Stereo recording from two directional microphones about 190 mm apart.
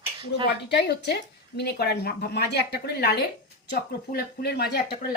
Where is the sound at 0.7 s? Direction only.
60° left (ahead or behind).